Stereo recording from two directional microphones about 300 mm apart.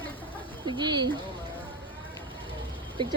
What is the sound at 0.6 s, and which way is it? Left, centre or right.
Speech, centre.